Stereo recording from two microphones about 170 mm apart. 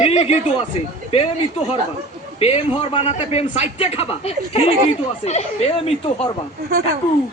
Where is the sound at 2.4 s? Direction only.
35° left (ahead or behind).